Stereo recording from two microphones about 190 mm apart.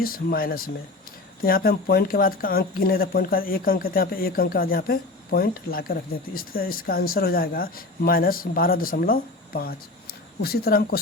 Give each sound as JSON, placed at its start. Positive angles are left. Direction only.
{"t": 0.0, "sound": "speech", "side_deg": 50}